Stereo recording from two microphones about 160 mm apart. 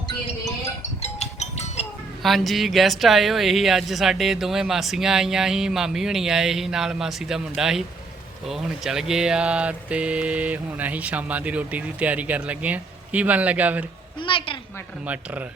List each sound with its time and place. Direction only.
1.0 s music: 45° left (ahead or behind)
2.2 s speech: centre (ahead or behind)
14.2 s a woman's voice: 35° left (ahead or behind)
15.0 s speech: 10° right (ahead or behind)